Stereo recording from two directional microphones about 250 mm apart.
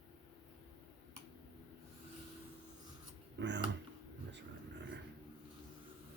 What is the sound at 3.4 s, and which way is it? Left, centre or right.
Speech, right.